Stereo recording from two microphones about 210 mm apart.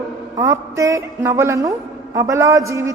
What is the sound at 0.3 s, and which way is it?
A woman's voice, 15° right (ahead or behind).